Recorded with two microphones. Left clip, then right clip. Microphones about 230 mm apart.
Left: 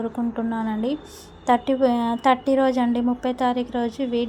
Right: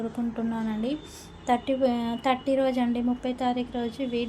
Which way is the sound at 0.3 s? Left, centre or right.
Centre.